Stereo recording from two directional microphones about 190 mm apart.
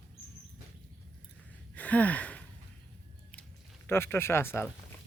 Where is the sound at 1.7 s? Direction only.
5° left (ahead or behind).